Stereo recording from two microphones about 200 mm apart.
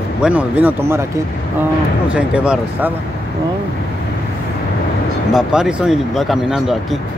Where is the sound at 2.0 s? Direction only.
5° right (ahead or behind).